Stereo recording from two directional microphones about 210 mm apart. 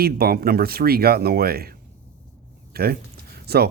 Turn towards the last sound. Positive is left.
turn(degrees=-50)  # may be behind; listen again after turning